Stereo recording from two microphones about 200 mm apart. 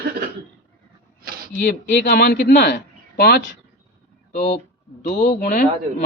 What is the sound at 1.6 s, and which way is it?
A man's voice, 55° left (ahead or behind).